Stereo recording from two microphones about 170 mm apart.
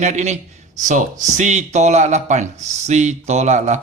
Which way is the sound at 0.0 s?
45° right (ahead or behind).